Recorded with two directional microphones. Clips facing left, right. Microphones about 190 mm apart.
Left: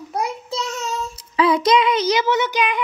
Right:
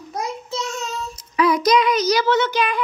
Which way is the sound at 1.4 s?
25° left (ahead or behind).